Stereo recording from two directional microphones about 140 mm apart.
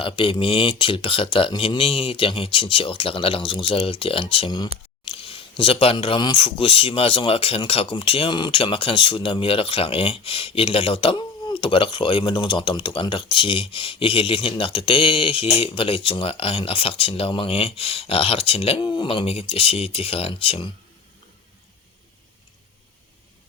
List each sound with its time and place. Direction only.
0.0 s speech: 40° left (ahead or behind)